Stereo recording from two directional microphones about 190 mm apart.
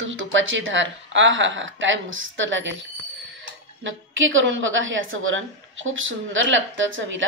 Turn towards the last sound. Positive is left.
turn(degrees=-90)